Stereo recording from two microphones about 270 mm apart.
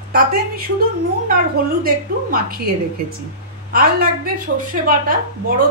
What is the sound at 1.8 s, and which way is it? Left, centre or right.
Speech, right.